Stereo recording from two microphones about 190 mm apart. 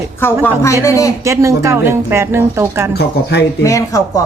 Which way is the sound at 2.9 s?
60° left (ahead or behind).